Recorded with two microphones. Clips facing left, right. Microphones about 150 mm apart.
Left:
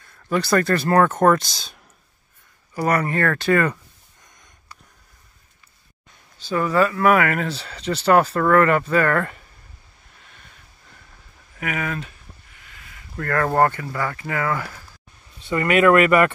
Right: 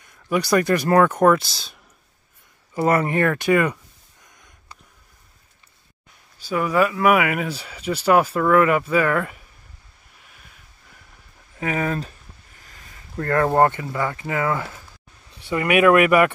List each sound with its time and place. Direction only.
0.0 s speech: 15° right (ahead or behind)
2.7 s speech: 25° right (ahead or behind)
6.3 s speech: 10° right (ahead or behind)
10.2 s a sound: 10° right (ahead or behind)
11.5 s speech: 30° right (ahead or behind)
12.5 s a sound: 40° right (ahead or behind)
13.2 s speech: 20° right (ahead or behind)